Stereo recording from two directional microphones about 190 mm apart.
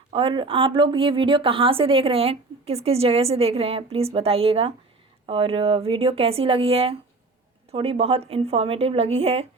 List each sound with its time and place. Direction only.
0.1 s a woman's voice: 25° right (ahead or behind)